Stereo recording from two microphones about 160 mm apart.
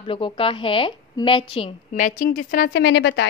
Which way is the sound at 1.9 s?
55° left (ahead or behind).